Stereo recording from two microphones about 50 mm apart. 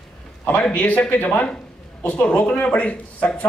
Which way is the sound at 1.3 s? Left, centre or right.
Left.